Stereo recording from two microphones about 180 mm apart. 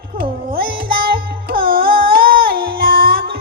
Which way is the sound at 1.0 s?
55° right (ahead or behind).